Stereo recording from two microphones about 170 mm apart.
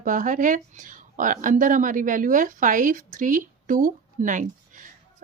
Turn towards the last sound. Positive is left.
turn(degrees=-50)  # may be behind; listen again after turning